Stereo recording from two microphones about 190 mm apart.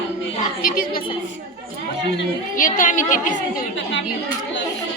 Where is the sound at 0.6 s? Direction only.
50° left (ahead or behind).